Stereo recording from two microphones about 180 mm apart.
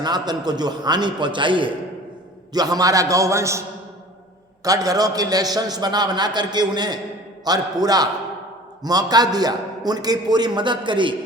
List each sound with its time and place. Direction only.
0.0 s a man's voice: 25° right (ahead or behind)
4.6 s a man's voice: 20° right (ahead or behind)